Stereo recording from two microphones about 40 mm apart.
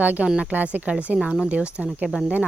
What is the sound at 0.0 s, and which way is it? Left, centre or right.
Speech, right.